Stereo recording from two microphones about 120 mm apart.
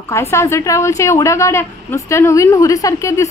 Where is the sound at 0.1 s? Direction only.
20° left (ahead or behind).